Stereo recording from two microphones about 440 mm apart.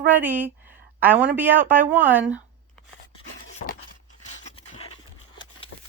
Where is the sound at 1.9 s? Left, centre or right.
Centre.